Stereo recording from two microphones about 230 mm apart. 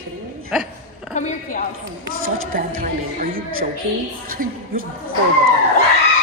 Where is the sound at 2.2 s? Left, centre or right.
Right.